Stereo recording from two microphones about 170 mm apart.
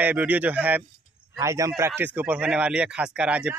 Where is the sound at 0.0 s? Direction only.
10° right (ahead or behind).